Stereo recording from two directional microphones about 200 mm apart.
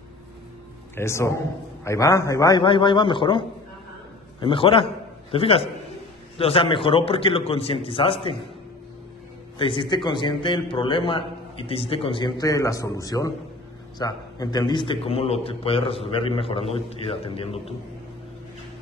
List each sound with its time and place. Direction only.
0.9 s a man's voice: 15° left (ahead or behind)
9.6 s a man's voice: 25° left (ahead or behind)